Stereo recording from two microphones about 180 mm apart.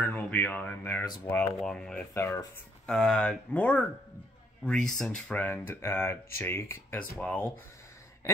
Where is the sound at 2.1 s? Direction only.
15° left (ahead or behind).